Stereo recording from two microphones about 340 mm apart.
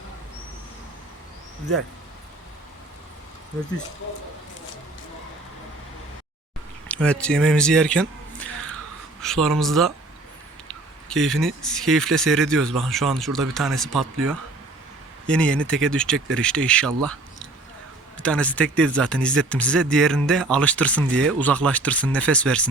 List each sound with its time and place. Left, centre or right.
6.8 s speech: centre
15.3 s speech: centre